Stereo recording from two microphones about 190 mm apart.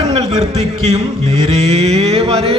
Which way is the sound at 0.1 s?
35° right (ahead or behind).